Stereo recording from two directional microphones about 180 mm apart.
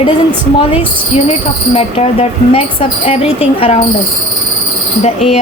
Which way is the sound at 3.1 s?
35° left (ahead or behind).